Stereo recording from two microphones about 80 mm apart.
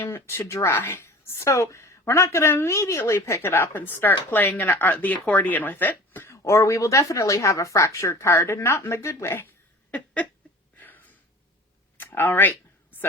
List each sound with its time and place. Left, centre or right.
0.0 s speech: left
6.3 s speech: left
10.8 s a sound: left